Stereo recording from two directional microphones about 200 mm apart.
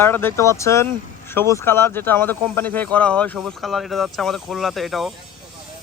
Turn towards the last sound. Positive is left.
turn(degrees=0)  # may be behind; listen again after turning